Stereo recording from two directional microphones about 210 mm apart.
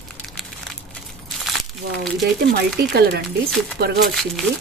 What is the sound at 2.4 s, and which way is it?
Speech, 50° right (ahead or behind).